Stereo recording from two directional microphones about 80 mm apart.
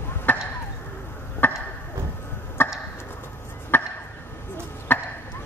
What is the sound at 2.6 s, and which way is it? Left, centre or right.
Chop, left.